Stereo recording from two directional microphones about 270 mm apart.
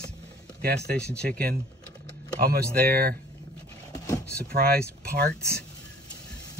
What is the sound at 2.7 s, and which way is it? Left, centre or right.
Speech, right.